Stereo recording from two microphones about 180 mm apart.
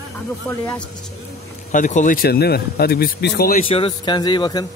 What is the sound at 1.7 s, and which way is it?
Speech, 45° left (ahead or behind).